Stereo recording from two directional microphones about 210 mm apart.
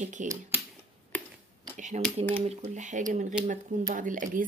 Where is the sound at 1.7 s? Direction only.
35° right (ahead or behind).